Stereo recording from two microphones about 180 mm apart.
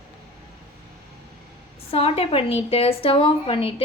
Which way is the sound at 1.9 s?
30° left (ahead or behind).